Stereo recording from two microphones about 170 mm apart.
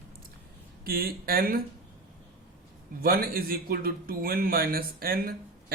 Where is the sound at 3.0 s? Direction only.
60° right (ahead or behind).